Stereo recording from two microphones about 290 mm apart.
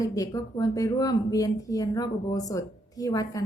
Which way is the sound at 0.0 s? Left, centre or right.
Centre.